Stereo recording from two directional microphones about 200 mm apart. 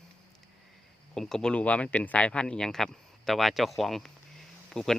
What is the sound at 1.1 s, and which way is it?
Speech, centre (ahead or behind).